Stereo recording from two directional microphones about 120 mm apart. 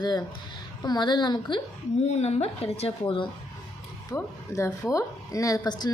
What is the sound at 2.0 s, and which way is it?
A woman's voice, 65° left (ahead or behind).